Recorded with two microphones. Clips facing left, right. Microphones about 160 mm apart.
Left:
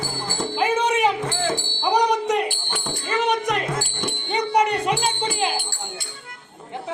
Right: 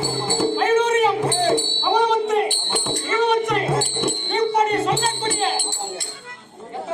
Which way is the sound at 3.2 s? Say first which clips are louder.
Right 3 dB; 15° left (ahead or behind).